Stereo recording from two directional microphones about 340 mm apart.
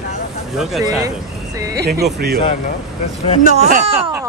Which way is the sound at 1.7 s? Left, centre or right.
Right.